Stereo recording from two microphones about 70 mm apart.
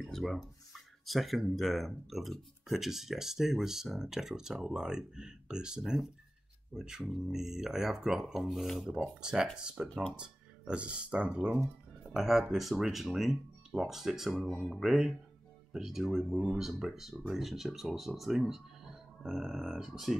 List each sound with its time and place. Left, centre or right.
0.0 s speech: centre
12.1 s speech: centre